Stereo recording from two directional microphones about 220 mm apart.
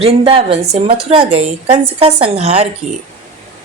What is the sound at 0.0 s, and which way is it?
Speech, 25° right (ahead or behind).